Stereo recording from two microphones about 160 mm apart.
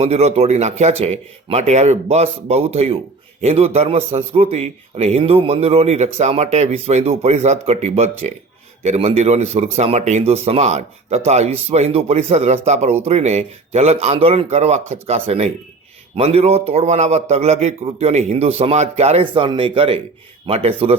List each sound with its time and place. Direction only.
0.0 s a man's voice: 40° right (ahead or behind)